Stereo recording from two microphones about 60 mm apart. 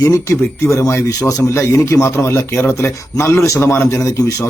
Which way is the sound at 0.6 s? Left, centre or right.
Left.